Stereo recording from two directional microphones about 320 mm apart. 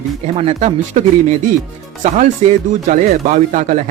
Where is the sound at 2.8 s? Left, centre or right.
Right.